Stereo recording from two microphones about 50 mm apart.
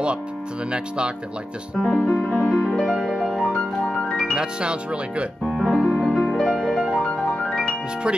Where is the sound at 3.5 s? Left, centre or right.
Centre.